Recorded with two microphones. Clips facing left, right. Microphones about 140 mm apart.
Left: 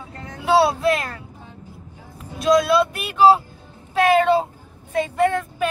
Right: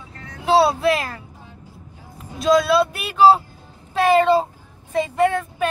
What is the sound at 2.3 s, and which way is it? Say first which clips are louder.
Speech: even; centre (ahead or behind).